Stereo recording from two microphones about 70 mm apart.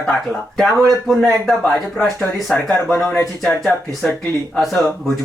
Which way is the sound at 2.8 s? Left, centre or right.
Left.